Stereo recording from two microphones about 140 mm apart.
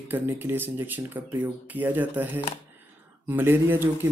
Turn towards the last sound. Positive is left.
turn(degrees=-15)  # may be behind; listen again after turning